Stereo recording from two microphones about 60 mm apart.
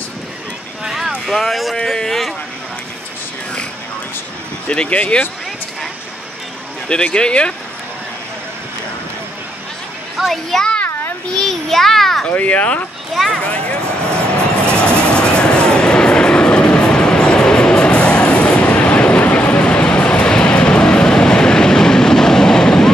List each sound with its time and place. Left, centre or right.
0.8 s a sound: centre
1.2 s a child's voice: centre
1.8 s a sound: centre
4.6 s speech: centre
6.9 s speech: centre
10.1 s a child's voice: centre
12.3 s speech: left
13.1 s a child's voice: centre
13.4 s speech: centre
15.0 s train: centre